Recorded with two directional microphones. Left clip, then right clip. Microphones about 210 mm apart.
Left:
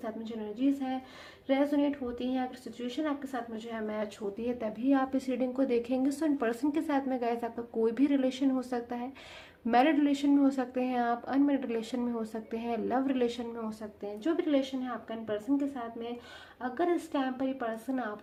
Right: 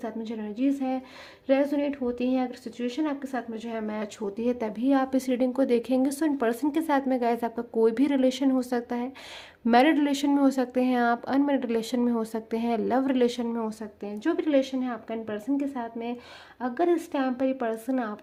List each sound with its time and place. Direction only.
0.0 s speech: 45° right (ahead or behind)